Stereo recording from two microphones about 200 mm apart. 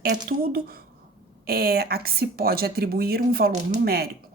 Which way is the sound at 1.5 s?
50° right (ahead or behind).